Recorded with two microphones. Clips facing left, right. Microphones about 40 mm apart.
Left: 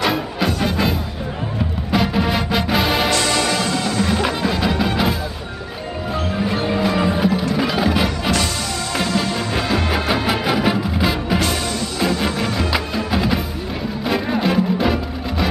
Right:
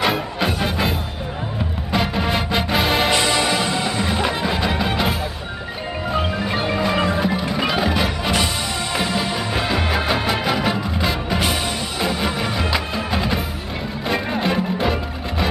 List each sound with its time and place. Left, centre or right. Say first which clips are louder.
0.0 s music: left 1 dB; centre
3.1 s music: even; centre
6.5 s marimba: left 1 dB; centre
6.8 s music: left 1 dB; centre
7.2 s music: left 2 dB; centre
8.9 s music: left 2 dB; centre
12.0 s music: left 2 dB; centre